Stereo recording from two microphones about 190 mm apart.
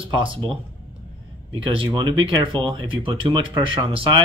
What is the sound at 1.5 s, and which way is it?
Speech, 25° right (ahead or behind).